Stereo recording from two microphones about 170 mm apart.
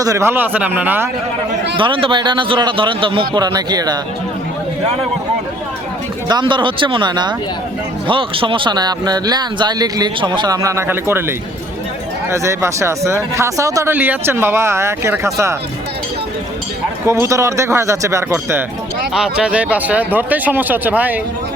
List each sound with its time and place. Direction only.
0.0 s speech: 15° right (ahead or behind)
1.7 s speech: 30° right (ahead or behind)
6.2 s speech: 25° right (ahead or behind)
17.1 s speech: 15° right (ahead or behind)
19.1 s speech: 5° right (ahead or behind)